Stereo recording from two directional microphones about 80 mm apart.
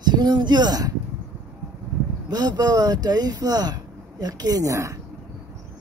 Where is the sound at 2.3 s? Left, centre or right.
Right.